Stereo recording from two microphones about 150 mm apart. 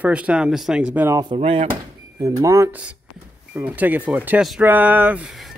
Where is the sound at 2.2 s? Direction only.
20° right (ahead or behind); by 5.5 s centre (ahead or behind).